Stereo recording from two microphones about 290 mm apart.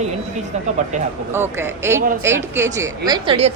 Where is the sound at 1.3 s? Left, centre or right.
Centre.